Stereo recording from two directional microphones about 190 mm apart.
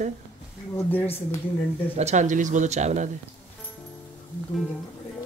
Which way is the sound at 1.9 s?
35° right (ahead or behind).